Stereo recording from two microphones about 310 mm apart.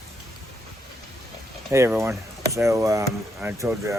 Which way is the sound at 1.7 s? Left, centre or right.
Centre.